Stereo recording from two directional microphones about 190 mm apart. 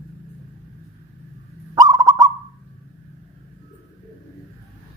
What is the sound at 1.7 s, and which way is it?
Bird, 20° right (ahead or behind).